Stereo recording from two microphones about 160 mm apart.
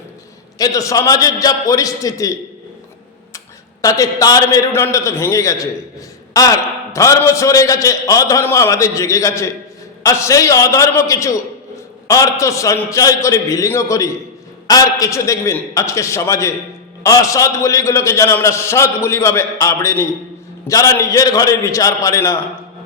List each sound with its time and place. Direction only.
0.6 s a man's voice: 20° left (ahead or behind)
3.3 s a man's voice: 20° left (ahead or behind)